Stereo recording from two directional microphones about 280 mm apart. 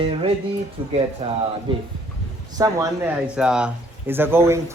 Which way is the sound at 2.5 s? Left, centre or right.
Centre.